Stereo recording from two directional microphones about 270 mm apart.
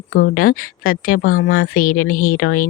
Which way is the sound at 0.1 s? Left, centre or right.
Left.